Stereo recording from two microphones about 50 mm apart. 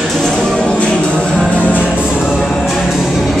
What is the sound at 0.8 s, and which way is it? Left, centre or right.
Music, left.